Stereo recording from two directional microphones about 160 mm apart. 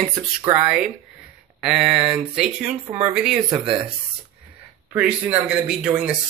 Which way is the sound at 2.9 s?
15° right (ahead or behind).